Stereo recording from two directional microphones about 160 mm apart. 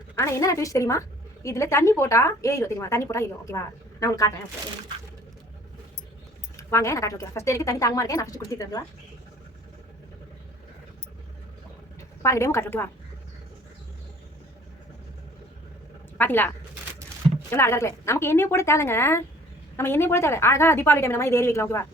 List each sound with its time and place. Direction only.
0.2 s a woman's voice: 20° left (ahead or behind)
6.6 s a woman's voice: 20° left (ahead or behind)
12.2 s a woman's voice: 20° left (ahead or behind)
16.1 s speech: 10° left (ahead or behind)
17.5 s a woman's voice: 15° left (ahead or behind)